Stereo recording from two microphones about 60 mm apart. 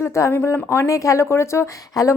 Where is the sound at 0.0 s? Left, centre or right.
Left.